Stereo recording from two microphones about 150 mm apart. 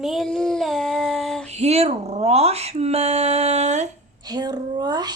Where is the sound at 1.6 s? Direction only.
45° right (ahead or behind).